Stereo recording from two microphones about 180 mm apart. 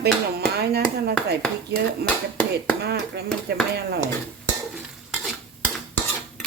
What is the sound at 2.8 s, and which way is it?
Speech, 65° right (ahead or behind).